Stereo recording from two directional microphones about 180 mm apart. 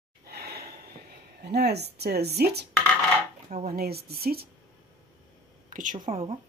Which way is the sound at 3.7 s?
60° right (ahead or behind).